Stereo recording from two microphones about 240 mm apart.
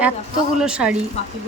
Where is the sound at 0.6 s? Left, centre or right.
Centre.